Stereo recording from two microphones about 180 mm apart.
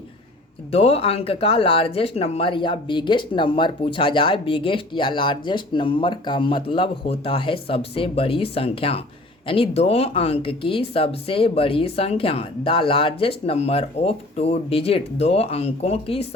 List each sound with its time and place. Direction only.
0.7 s speech: 35° left (ahead or behind)